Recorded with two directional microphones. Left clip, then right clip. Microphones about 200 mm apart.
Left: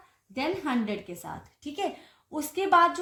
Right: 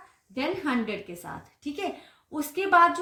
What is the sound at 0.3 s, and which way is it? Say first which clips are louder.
Speech: right 1 dB; 30° left (ahead or behind).